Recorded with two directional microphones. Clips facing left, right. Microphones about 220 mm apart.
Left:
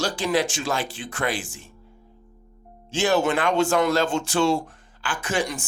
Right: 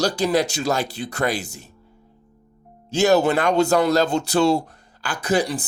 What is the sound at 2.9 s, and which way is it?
Speech, 40° right (ahead or behind).